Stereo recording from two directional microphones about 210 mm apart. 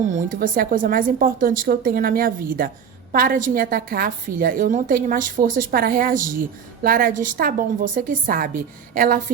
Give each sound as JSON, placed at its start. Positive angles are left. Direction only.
{"t": 0.1, "sound": "a woman's voice", "side_deg": -40}